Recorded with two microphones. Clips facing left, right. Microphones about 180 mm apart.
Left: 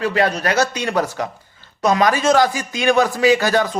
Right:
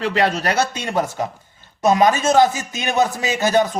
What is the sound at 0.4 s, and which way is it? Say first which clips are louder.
A man's voice: left 2 dB; 30° right (ahead or behind).